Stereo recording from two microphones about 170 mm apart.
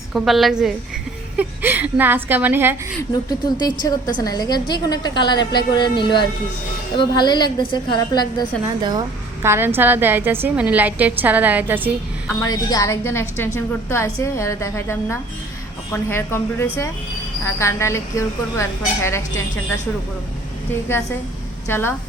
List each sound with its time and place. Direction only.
0.1 s a woman's voice: centre (ahead or behind)
3.6 s a woman's voice: 25° left (ahead or behind)
8.8 s a woman's voice: 25° right (ahead or behind)
12.4 s a woman's voice: 20° left (ahead or behind)
20.9 s a woman's voice: 15° left (ahead or behind)